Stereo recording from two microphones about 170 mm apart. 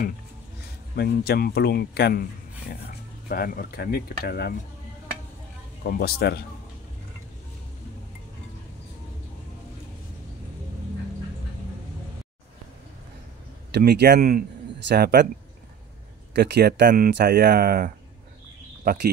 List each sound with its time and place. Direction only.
0.9 s speech: 70° left (ahead or behind)
3.3 s speech: 60° left (ahead or behind)
5.9 s speech: 65° left (ahead or behind)
13.7 s speech: 75° right (ahead or behind)
16.3 s speech: 75° right (ahead or behind)